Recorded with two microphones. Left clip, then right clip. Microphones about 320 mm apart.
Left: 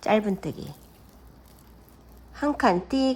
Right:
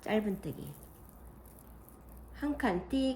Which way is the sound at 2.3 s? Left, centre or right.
Centre.